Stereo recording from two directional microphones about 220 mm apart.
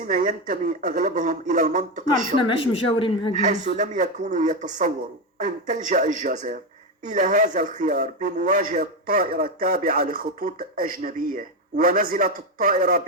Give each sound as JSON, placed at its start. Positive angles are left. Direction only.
{"t": 0.1, "sound": "speech", "side_deg": -35}
{"t": 2.5, "sound": "speech", "side_deg": 25}
{"t": 3.3, "sound": "speech", "side_deg": -35}